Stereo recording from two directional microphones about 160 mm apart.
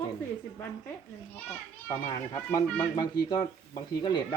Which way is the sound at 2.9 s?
25° left (ahead or behind).